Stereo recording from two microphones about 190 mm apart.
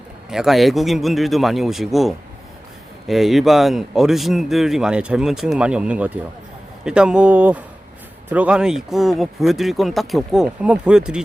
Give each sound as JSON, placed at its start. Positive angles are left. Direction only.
{"t": 0.3, "sound": "a man's voice", "side_deg": 0}